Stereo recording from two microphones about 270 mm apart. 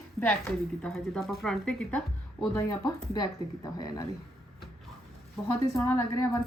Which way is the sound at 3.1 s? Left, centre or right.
Centre.